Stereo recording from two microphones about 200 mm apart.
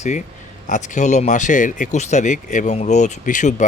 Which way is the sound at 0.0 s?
40° left (ahead or behind).